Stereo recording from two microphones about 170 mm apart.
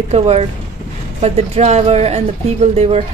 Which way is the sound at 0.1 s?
35° right (ahead or behind).